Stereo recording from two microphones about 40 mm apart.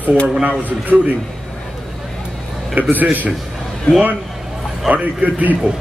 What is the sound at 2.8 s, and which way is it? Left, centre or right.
Speech, right.